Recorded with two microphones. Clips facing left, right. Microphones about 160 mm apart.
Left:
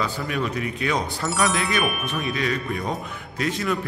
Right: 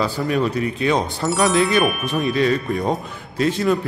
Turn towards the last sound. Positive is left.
turn(degrees=-30)  # may be behind; listen again after turning